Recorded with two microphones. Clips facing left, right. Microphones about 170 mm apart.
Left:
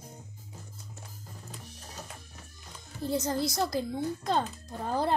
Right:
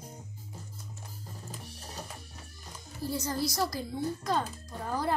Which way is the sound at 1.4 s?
35° right (ahead or behind).